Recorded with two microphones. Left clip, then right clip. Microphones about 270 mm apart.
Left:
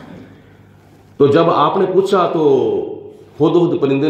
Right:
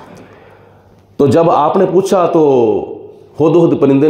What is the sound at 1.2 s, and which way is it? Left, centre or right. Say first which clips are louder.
Speech: right 2 dB; right.